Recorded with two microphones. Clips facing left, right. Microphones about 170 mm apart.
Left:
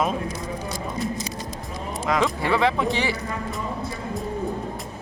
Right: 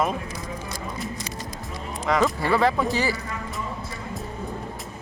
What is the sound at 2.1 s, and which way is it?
Speech, 5° left (ahead or behind).